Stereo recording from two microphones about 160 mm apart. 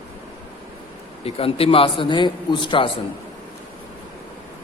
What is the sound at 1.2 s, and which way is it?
A man's voice, 35° left (ahead or behind).